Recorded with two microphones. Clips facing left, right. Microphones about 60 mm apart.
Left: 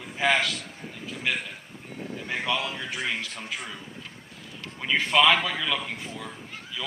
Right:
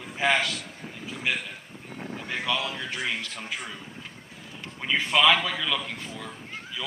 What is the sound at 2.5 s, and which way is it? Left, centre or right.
Speech, left.